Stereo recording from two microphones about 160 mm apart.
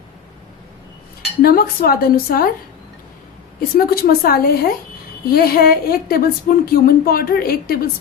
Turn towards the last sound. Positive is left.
turn(degrees=70)  # may be behind; listen again after turning